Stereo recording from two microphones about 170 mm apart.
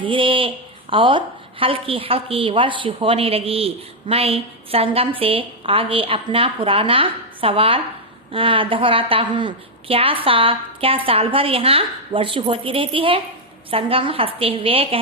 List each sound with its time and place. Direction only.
0.0 s a woman's voice: 30° right (ahead or behind)